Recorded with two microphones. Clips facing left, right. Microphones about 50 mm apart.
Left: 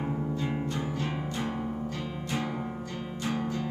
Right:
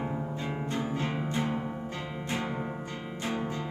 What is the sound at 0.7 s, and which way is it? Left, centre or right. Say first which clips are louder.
Music: right 1 dB; right.